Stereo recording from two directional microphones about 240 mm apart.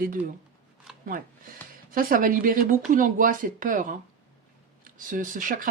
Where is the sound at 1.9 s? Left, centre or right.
Right.